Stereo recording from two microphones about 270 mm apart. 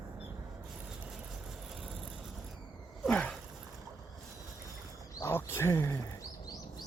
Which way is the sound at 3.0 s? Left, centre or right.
Centre.